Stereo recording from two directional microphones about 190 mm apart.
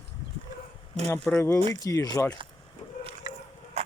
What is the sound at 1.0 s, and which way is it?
Speech, 5° left (ahead or behind).